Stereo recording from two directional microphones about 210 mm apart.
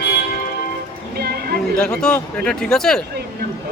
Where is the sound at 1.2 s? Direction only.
50° right (ahead or behind).